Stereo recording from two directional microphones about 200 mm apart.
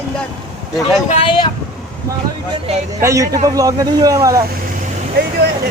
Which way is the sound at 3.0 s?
15° right (ahead or behind).